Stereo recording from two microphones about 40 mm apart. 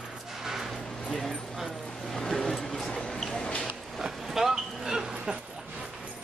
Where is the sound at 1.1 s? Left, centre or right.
Centre.